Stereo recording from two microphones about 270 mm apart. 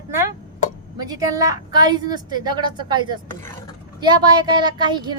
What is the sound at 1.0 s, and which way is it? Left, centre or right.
Speech, centre.